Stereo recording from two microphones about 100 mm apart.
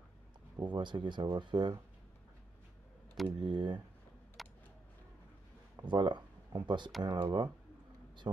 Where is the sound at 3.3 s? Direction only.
50° right (ahead or behind).